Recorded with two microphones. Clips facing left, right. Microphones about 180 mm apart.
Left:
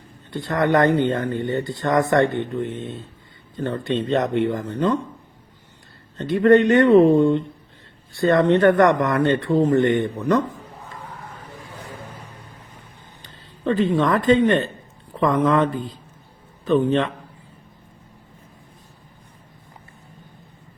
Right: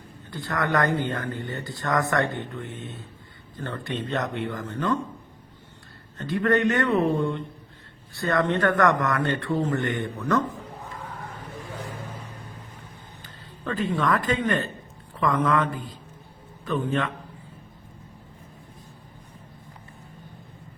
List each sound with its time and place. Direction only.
0.3 s speech: 20° left (ahead or behind)
6.1 s speech: 20° left (ahead or behind)
13.2 s speech: 25° left (ahead or behind)